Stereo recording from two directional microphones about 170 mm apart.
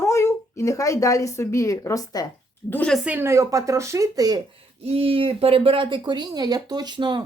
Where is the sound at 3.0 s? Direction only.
10° right (ahead or behind).